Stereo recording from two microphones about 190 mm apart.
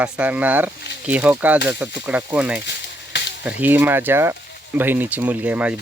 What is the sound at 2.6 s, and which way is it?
Frying, 65° left (ahead or behind).